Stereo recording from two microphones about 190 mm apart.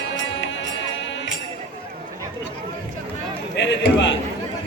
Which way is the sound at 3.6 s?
70° left (ahead or behind).